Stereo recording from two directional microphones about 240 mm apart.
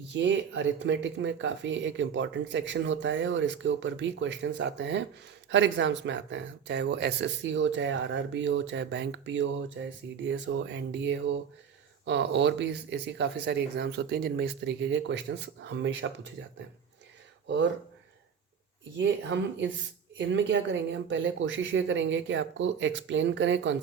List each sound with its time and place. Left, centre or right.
0.1 s speech: right
17.4 s speech: right
18.9 s speech: right